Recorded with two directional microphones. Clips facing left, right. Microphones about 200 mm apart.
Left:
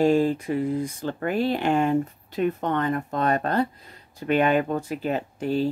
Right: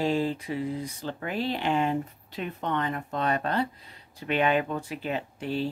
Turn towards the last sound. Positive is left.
turn(degrees=45)  # may be behind; listen again after turning